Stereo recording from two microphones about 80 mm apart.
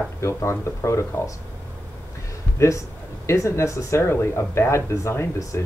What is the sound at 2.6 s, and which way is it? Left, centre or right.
Speech, left.